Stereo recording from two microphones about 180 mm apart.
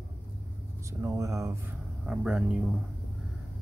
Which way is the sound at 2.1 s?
5° right (ahead or behind).